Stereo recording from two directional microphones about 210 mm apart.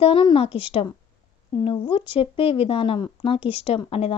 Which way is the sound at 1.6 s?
25° left (ahead or behind).